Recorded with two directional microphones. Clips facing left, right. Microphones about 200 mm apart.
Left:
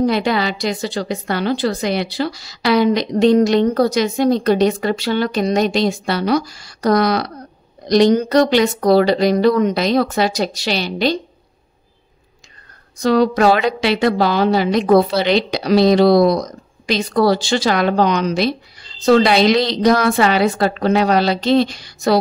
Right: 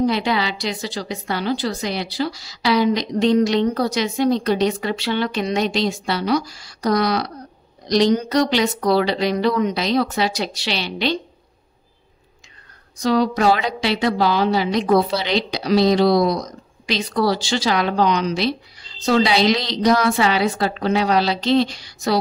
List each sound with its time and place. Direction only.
0.0 s a woman's voice: 50° left (ahead or behind)
13.0 s a woman's voice: 60° left (ahead or behind)